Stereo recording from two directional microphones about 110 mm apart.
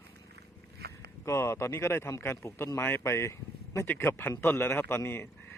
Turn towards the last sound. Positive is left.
turn(degrees=20)  # may be behind; listen again after turning